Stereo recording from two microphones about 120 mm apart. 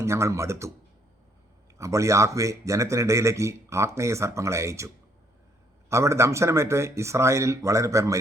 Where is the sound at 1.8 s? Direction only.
25° right (ahead or behind).